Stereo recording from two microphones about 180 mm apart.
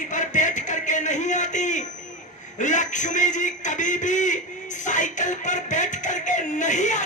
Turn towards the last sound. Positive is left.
turn(degrees=45)  # may be behind; listen again after turning